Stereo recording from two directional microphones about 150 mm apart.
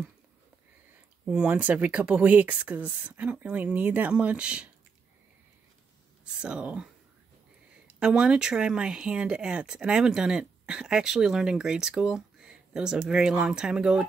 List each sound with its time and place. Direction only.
1.2 s speech: 10° right (ahead or behind)
6.4 s speech: 5° right (ahead or behind)